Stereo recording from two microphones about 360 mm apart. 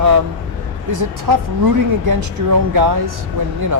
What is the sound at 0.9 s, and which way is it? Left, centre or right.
Speech, right.